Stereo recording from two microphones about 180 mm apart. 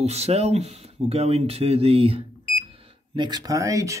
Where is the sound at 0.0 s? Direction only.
35° right (ahead or behind).